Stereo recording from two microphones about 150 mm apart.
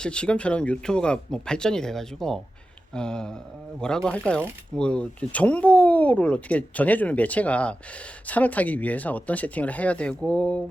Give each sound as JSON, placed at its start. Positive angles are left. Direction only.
{"t": 0.0, "sound": "speech", "side_deg": 5}